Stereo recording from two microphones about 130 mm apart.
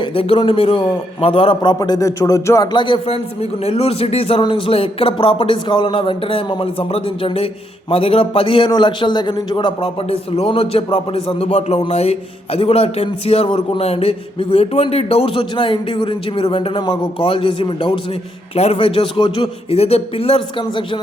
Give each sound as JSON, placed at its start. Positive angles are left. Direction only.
{"t": 0.0, "sound": "a man's voice", "side_deg": 45}
{"t": 1.8, "sound": "a sound", "side_deg": 25}
{"t": 2.7, "sound": "speech", "side_deg": 40}
{"t": 3.6, "sound": "a man's voice", "side_deg": 50}
{"t": 18.5, "sound": "a man's voice", "side_deg": 50}